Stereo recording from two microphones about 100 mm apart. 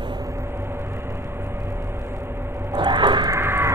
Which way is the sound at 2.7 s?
50° right (ahead or behind).